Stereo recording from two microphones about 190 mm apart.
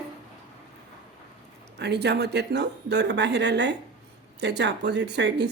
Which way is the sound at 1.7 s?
60° right (ahead or behind).